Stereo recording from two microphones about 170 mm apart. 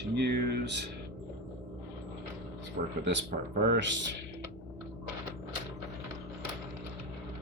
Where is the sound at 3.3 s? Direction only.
65° right (ahead or behind).